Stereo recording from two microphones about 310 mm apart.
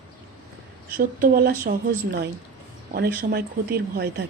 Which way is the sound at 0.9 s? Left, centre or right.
Right.